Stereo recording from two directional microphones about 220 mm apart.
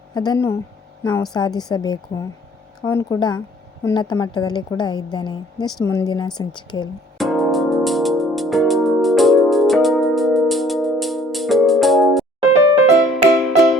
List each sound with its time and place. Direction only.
0.1 s a woman's voice: 20° left (ahead or behind)
7.2 s music: centre (ahead or behind)